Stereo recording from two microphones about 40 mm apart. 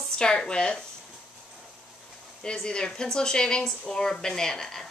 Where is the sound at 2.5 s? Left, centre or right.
Centre.